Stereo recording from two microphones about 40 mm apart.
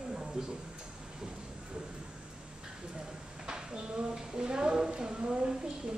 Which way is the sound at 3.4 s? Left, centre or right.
Centre.